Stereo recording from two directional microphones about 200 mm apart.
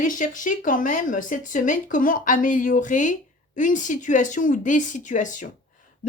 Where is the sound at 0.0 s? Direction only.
40° left (ahead or behind).